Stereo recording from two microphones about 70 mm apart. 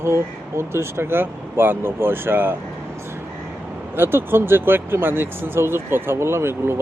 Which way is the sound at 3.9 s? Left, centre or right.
Right.